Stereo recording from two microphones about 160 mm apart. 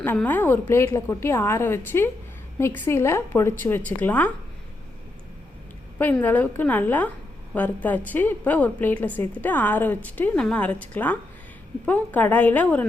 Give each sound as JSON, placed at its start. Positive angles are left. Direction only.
{"t": 0.0, "sound": "a woman's voice", "side_deg": 10}
{"t": 6.0, "sound": "a woman's voice", "side_deg": 10}